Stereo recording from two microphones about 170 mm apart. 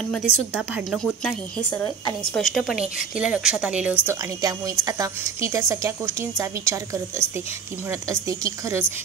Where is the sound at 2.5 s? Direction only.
5° right (ahead or behind).